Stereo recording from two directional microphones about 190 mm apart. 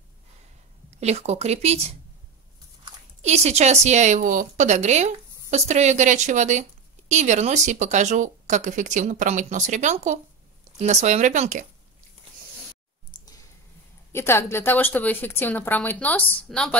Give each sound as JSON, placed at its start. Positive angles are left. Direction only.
{"t": 0.8, "sound": "a woman's voice", "side_deg": -35}
{"t": 3.2, "sound": "a woman's voice", "side_deg": -35}
{"t": 13.1, "sound": "a sound", "side_deg": 20}
{"t": 14.1, "sound": "speech", "side_deg": 15}